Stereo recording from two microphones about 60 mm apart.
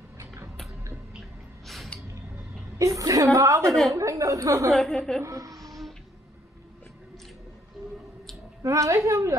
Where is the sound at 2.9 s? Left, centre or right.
Right.